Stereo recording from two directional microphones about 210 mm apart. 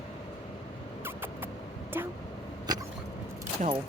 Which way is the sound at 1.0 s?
10° right (ahead or behind).